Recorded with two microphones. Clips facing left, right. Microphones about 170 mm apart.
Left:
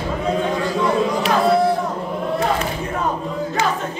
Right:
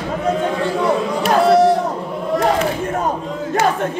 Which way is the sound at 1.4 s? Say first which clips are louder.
Right 5 dB; 80° right.